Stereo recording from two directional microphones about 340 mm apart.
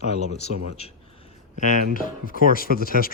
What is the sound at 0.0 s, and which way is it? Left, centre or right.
Speech, centre.